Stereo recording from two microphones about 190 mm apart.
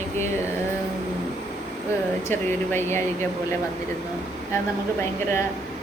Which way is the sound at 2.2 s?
10° left (ahead or behind).